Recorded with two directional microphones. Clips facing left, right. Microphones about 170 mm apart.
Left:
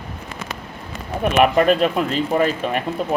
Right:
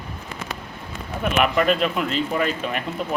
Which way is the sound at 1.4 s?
40° left (ahead or behind).